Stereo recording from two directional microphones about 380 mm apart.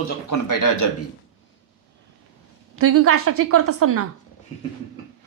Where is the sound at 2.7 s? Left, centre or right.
Right.